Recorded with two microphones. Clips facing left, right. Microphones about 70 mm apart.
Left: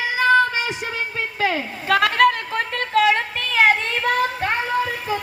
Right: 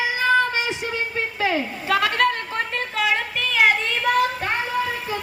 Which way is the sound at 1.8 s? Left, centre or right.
Left.